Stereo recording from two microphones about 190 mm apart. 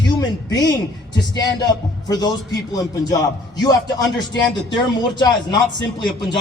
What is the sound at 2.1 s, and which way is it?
A man's voice, 20° left (ahead or behind).